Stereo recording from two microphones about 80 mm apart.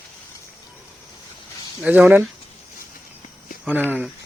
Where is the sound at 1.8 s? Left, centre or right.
Centre.